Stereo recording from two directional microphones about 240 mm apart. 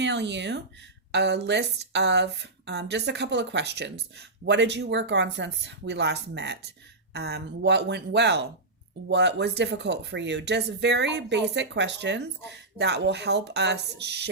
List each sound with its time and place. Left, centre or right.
0.0 s speech: right